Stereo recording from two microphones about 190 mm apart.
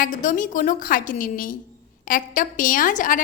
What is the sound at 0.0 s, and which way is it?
A woman's voice, 45° left (ahead or behind).